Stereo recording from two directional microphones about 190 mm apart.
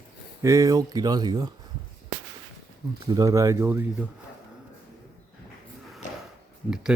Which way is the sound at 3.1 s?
20° right (ahead or behind).